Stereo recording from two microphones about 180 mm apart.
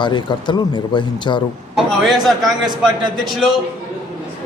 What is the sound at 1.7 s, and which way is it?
Speech, centre (ahead or behind).